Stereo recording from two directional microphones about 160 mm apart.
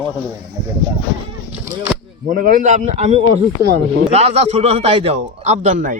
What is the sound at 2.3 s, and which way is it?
A man's voice, 55° right (ahead or behind).